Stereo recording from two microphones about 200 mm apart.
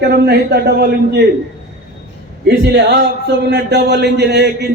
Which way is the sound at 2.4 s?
55° right (ahead or behind).